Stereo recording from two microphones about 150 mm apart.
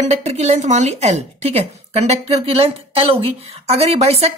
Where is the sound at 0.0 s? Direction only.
45° right (ahead or behind).